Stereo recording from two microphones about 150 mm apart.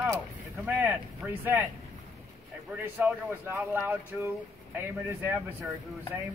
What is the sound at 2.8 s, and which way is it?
Speech, 15° right (ahead or behind).